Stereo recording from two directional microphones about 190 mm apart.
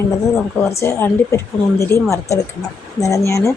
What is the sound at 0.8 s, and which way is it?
A woman's voice, 15° left (ahead or behind).